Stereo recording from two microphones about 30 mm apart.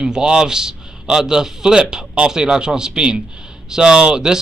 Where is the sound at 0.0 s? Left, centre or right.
Right.